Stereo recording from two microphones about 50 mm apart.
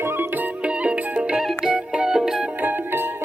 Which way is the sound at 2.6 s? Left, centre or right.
Right.